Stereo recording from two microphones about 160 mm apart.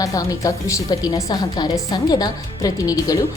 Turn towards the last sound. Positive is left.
turn(degrees=20)  # may be behind; listen again after turning